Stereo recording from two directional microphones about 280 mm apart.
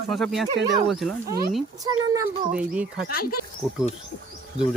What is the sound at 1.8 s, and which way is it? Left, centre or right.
Speech, centre.